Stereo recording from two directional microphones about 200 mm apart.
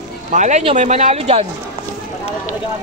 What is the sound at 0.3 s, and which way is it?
Speech, 35° right (ahead or behind).